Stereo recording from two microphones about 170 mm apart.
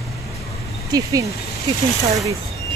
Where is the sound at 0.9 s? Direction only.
20° right (ahead or behind).